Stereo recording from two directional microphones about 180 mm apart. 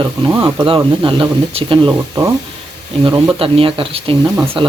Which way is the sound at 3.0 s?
25° right (ahead or behind).